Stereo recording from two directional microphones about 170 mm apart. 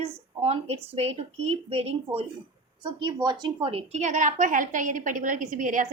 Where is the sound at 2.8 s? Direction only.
25° right (ahead or behind).